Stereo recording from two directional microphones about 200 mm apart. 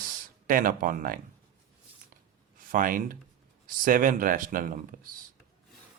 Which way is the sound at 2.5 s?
45° right (ahead or behind).